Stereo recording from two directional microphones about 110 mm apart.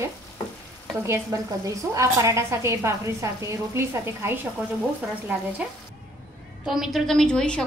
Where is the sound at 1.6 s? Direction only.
30° right (ahead or behind).